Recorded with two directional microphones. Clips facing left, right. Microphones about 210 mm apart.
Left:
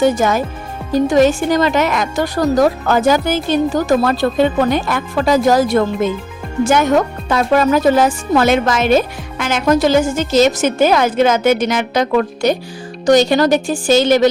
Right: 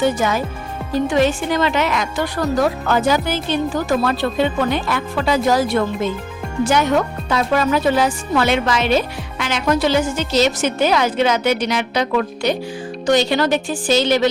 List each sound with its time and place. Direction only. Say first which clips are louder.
0.0 s speech: left 4 dB; 45° left (ahead or behind)